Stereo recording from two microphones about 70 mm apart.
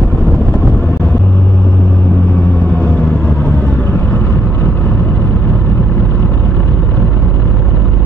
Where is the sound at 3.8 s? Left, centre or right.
Left.